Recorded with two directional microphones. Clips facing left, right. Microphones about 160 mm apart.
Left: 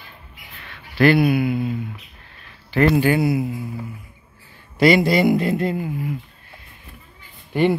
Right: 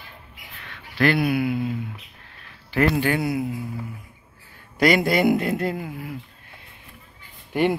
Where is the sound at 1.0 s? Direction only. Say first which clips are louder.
Left 5 dB; 5° left (ahead or behind).